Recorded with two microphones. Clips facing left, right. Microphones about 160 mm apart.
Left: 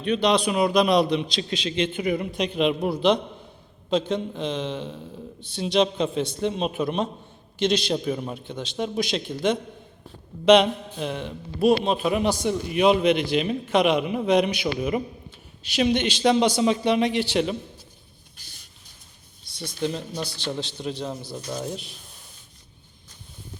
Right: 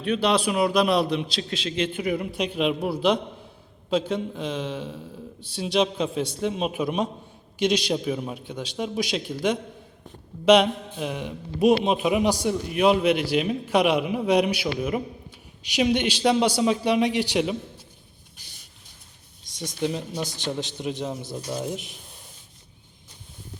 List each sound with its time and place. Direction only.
0.0 s a man's voice: 5° right (ahead or behind)
19.5 s a man's voice: 15° right (ahead or behind)